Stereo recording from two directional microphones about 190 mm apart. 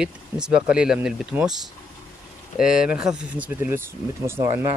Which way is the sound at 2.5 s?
5° right (ahead or behind).